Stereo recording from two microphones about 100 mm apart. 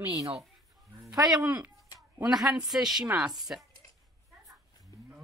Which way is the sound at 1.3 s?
10° right (ahead or behind).